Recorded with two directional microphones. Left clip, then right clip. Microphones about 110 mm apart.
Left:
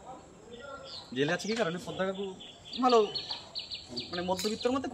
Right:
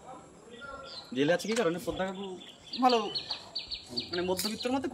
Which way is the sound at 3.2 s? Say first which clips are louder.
Right 1 dB; 10° left (ahead or behind).